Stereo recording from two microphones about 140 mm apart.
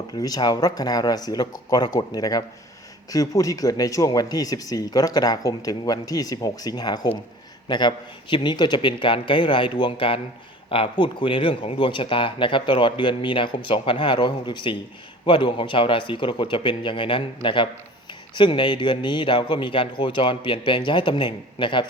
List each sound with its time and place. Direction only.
0.1 s a man's voice: 25° left (ahead or behind)